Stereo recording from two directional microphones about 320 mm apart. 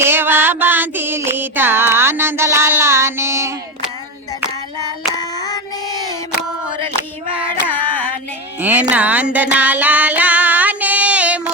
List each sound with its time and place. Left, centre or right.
0.0 s music: centre
7.9 s female singing: centre
8.6 s music: centre